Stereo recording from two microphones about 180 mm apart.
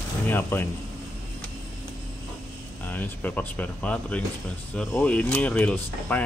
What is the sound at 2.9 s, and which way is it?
Speech, 10° left (ahead or behind).